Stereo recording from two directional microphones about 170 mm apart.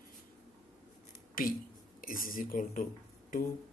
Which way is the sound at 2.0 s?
55° left (ahead or behind).